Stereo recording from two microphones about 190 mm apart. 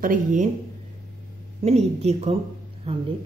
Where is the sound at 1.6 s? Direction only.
35° right (ahead or behind).